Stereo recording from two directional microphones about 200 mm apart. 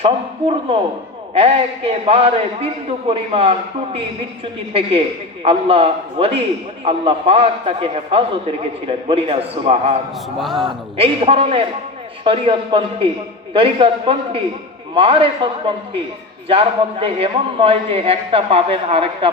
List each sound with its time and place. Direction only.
0.0 s a man's voice: 25° right (ahead or behind)
4.7 s a man's voice: 30° right (ahead or behind)
10.4 s a man's voice: centre (ahead or behind)
10.7 s a man's voice: 30° right (ahead or behind)